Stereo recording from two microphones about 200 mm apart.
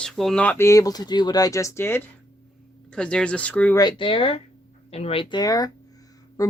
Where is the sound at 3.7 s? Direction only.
20° left (ahead or behind).